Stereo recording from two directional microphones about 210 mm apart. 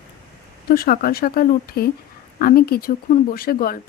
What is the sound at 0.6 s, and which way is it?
Speech, 45° left (ahead or behind).